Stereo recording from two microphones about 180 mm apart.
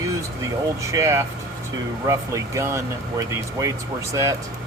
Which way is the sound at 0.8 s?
15° right (ahead or behind).